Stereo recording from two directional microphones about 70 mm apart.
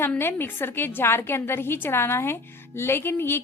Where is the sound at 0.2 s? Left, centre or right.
Left.